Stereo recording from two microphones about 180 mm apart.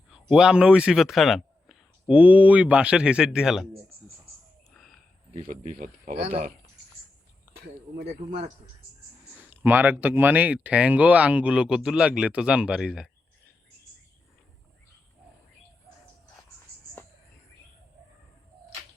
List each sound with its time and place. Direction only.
0.1 s speech: 5° right (ahead or behind)
4.7 s a sound: centre (ahead or behind)
5.5 s speech: 45° right (ahead or behind)
7.6 s speech: 65° right (ahead or behind)
9.3 s speech: 10° right (ahead or behind)